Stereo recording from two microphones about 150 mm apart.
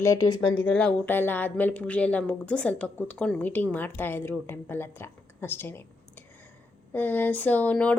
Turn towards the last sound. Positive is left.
turn(degrees=10)  # may be behind; listen again after turning